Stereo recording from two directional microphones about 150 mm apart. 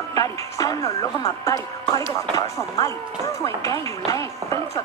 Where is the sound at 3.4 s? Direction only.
20° left (ahead or behind).